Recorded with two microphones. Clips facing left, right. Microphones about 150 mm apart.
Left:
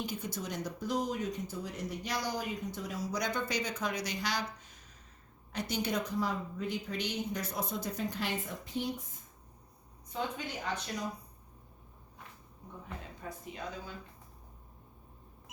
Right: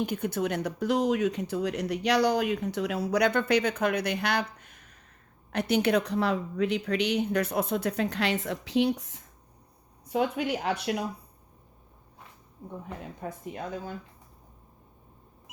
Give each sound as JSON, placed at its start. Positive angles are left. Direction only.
{"t": 0.0, "sound": "speech", "side_deg": -60}
{"t": 10.1, "sound": "speech", "side_deg": -70}
{"t": 13.2, "sound": "speech", "side_deg": -50}